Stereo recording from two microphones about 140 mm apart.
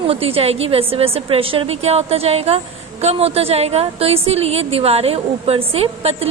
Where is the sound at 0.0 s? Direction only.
45° right (ahead or behind).